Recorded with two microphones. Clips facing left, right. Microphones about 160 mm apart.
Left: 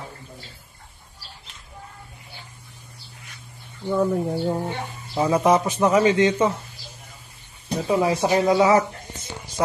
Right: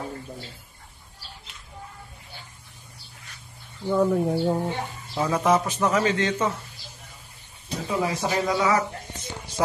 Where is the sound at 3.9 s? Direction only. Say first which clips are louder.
Even; 5° right (ahead or behind).